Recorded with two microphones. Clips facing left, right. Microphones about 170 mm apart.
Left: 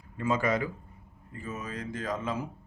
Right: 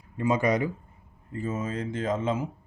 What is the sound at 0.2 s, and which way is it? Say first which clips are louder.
Speech: right 4 dB; 20° right (ahead or behind).